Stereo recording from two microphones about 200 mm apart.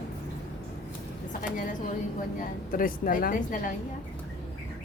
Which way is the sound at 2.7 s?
45° left (ahead or behind).